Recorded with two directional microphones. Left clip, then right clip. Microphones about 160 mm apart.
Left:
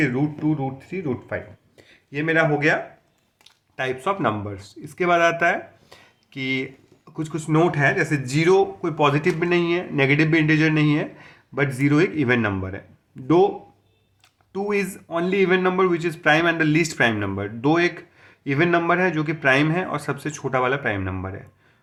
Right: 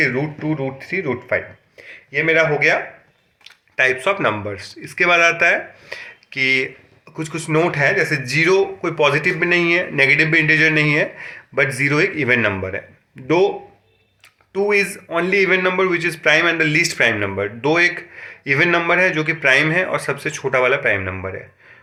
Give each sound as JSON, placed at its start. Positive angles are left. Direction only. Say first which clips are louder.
{"t": 0.2, "sound": "speech", "louder": "right 2 dB", "side_deg": 30}
{"t": 1.8, "sound": "a man's voice", "louder": "right 8 dB", "side_deg": 40}
{"t": 14.5, "sound": "speech", "louder": "right 7 dB", "side_deg": 45}